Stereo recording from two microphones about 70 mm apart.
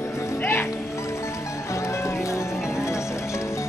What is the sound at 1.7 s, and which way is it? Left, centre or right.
Music, left.